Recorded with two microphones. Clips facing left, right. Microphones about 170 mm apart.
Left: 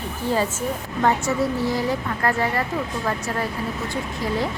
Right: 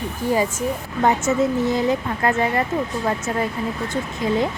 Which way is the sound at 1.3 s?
20° right (ahead or behind).